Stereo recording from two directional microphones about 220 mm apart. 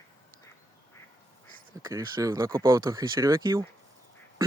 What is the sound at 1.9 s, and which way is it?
Speech, 15° right (ahead or behind).